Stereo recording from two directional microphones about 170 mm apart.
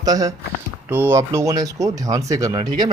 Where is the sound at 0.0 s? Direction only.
20° right (ahead or behind).